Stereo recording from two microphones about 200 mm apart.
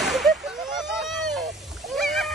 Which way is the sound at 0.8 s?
Centre (ahead or behind).